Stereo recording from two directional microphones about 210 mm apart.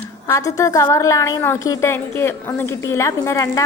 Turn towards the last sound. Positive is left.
turn(degrees=15)  # may be behind; listen again after turning